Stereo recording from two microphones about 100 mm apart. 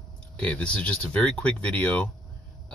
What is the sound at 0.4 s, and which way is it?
Speech, 10° left (ahead or behind).